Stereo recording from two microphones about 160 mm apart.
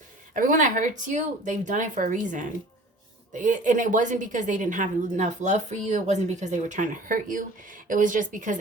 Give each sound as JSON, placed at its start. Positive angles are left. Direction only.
{"t": 0.3, "sound": "a woman's voice", "side_deg": -55}